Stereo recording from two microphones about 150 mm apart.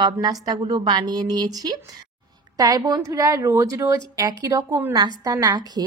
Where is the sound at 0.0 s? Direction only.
25° right (ahead or behind).